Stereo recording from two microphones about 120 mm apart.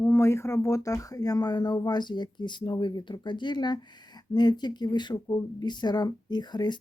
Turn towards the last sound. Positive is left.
turn(degrees=35)  # may be behind; listen again after turning